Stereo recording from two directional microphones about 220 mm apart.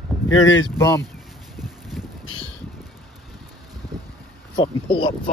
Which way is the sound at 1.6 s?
Centre (ahead or behind).